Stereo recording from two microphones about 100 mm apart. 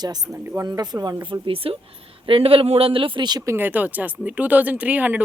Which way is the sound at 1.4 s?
65° right (ahead or behind).